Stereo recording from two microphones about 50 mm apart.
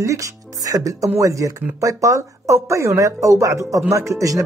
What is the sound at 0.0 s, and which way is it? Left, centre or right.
Speech, right.